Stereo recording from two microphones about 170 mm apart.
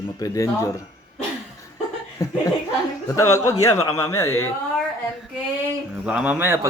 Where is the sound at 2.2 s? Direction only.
20° left (ahead or behind).